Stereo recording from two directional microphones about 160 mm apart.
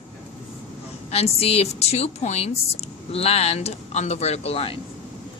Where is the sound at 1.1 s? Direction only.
40° left (ahead or behind).